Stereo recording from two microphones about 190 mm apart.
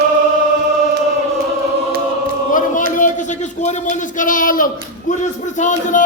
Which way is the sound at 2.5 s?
45° left (ahead or behind).